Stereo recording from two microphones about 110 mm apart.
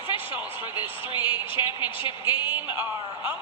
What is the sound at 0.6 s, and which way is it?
A woman's voice, 50° left (ahead or behind).